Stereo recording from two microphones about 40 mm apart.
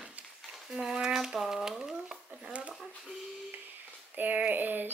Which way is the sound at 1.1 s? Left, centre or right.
Centre.